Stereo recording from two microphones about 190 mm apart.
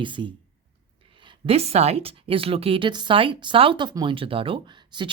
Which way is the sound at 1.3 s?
30° right (ahead or behind).